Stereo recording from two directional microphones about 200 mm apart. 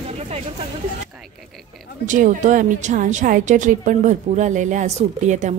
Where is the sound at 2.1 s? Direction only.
40° right (ahead or behind).